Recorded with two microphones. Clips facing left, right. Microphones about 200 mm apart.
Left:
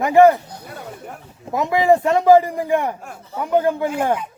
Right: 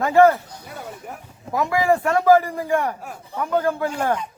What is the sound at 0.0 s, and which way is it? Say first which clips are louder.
Speech: left 3 dB; 15° left (ahead or behind).